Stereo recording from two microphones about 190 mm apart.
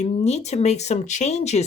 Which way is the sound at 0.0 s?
35° left (ahead or behind).